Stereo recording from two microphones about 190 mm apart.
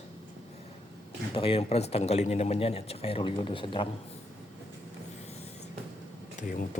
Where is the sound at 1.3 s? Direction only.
30° left (ahead or behind).